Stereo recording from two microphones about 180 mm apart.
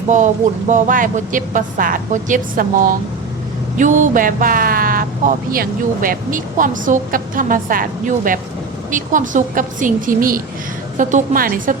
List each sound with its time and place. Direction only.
0.7 s speech: 45° right (ahead or behind)